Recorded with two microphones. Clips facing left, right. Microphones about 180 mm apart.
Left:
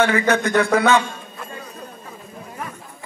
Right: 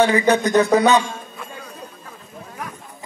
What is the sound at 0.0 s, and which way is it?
Speech, 15° right (ahead or behind).